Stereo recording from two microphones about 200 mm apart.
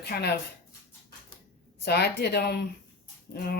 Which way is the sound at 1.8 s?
55° left (ahead or behind).